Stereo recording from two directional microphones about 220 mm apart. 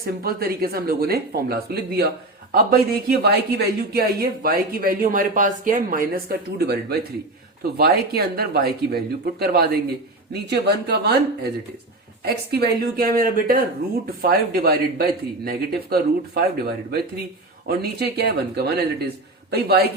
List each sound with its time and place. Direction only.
0.0 s a woman's voice: 45° right (ahead or behind)